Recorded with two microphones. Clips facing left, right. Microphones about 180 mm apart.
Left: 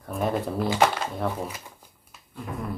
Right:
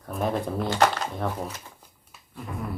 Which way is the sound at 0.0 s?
Centre (ahead or behind).